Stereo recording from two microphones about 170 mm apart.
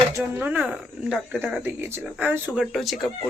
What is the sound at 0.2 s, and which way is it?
Speech, 10° right (ahead or behind).